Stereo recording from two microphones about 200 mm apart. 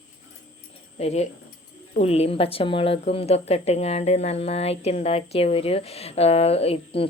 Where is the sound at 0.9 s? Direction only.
35° left (ahead or behind).